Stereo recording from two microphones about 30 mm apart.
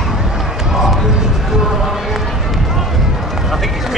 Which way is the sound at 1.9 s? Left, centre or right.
Centre.